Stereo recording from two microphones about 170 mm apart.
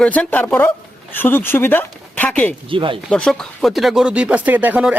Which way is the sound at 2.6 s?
30° right (ahead or behind).